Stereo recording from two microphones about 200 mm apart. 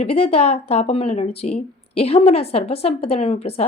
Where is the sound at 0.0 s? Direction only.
30° left (ahead or behind).